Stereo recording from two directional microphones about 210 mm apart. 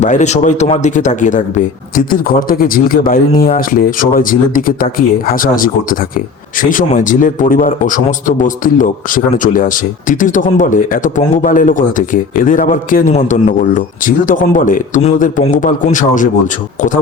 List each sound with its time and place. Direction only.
0.0 s a man's voice: 35° left (ahead or behind)